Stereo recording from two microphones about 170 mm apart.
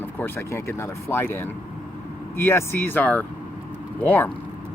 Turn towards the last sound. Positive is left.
turn(degrees=10)  # may be behind; listen again after turning